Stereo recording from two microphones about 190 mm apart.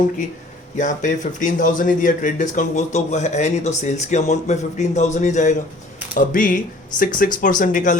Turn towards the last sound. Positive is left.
turn(degrees=45)  # may be behind; listen again after turning